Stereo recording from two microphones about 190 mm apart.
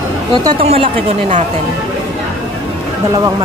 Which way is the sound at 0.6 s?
35° right (ahead or behind).